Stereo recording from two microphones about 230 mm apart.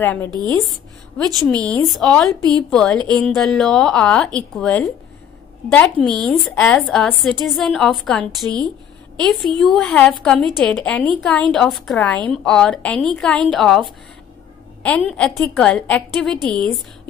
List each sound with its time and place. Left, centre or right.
0.0 s a woman's voice: centre